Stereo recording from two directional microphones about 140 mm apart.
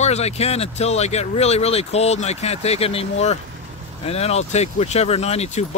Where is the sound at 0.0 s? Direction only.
50° left (ahead or behind).